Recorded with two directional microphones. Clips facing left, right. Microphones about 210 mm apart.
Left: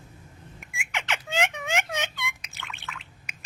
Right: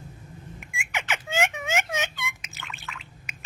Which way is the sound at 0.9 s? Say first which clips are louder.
Right 1 dB; 5° right (ahead or behind).